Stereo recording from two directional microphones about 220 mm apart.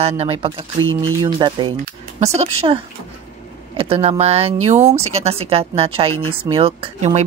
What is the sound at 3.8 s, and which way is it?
Speech, 25° right (ahead or behind).